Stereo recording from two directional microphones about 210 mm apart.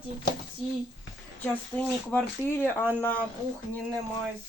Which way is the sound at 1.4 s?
5° left (ahead or behind).